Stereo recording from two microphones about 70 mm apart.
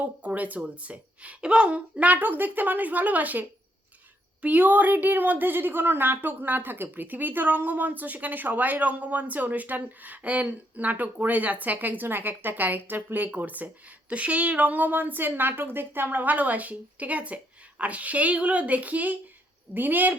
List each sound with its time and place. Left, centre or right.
0.2 s a woman's voice: centre